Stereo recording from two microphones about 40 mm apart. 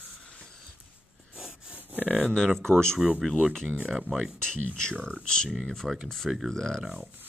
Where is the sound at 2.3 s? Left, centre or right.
Centre.